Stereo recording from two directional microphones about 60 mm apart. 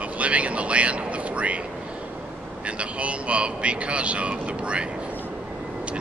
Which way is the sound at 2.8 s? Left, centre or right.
Right.